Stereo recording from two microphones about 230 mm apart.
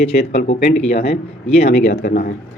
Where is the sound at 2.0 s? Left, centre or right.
Left.